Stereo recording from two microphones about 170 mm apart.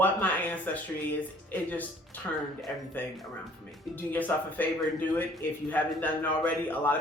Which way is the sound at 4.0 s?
10° left (ahead or behind).